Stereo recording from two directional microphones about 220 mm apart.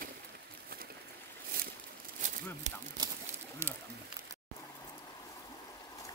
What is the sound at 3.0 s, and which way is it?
Bird, 20° right (ahead or behind).